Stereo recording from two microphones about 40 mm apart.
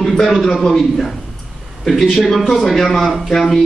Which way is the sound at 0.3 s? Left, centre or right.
Centre.